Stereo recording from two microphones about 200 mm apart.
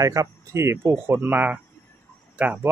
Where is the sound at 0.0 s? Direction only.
15° right (ahead or behind).